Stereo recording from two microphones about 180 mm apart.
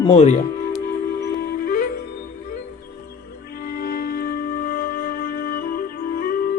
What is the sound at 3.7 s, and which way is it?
Music, 60° left (ahead or behind).